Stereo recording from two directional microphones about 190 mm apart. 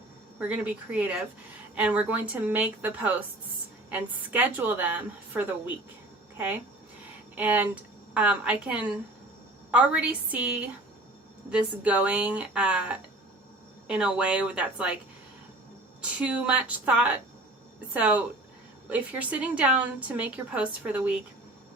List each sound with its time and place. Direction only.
0.3 s a woman's voice: 5° right (ahead or behind)
7.3 s a woman's voice: 10° right (ahead or behind)
16.0 s a woman's voice: 5° right (ahead or behind)